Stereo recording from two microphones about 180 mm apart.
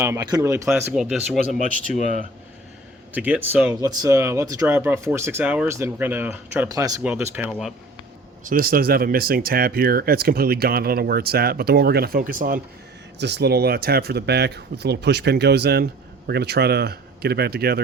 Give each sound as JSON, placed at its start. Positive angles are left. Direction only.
{"t": 0.0, "sound": "speech", "side_deg": -20}
{"t": 1.6, "sound": "speech", "side_deg": 45}
{"t": 3.1, "sound": "speech", "side_deg": -10}
{"t": 3.8, "sound": "speech", "side_deg": -20}
{"t": 7.0, "sound": "speech", "side_deg": -10}
{"t": 8.4, "sound": "speech", "side_deg": -55}
{"t": 13.1, "sound": "speech", "side_deg": -65}